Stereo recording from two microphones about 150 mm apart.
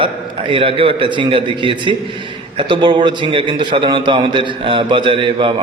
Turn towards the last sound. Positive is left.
turn(degrees=-35)  # may be behind; listen again after turning